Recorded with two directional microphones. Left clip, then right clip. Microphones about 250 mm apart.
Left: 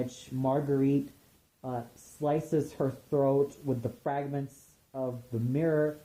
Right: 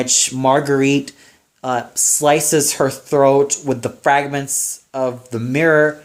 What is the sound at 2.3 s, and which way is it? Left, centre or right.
Speech, centre.